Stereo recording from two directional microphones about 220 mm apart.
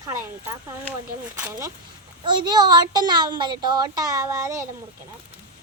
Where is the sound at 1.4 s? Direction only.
15° right (ahead or behind).